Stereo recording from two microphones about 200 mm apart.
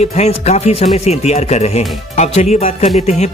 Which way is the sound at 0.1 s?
35° left (ahead or behind).